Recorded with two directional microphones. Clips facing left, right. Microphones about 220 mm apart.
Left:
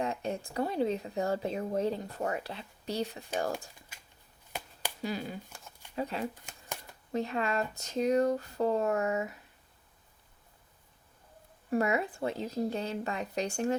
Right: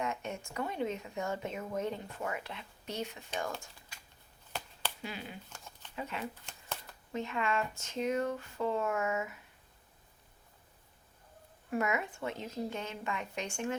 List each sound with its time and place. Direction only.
0.0 s speech: 35° left (ahead or behind)
5.0 s speech: 40° left (ahead or behind)
5.5 s a sound: 10° left (ahead or behind)
6.0 s speech: 35° left (ahead or behind)
11.7 s speech: 35° left (ahead or behind)